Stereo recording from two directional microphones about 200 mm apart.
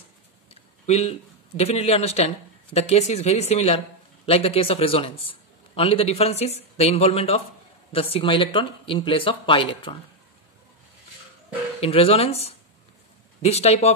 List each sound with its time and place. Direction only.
0.5 s a sound: 30° left (ahead or behind)
1.6 s a man's voice: 30° left (ahead or behind)
11.8 s a man's voice: 30° left (ahead or behind)
13.4 s speech: 30° left (ahead or behind)